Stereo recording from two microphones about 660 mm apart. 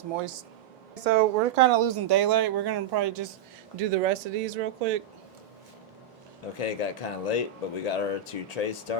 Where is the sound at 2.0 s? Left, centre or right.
Right.